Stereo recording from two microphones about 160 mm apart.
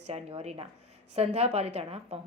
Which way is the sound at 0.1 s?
40° right (ahead or behind).